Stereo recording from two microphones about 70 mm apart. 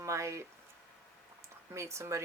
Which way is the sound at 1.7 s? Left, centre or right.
Right.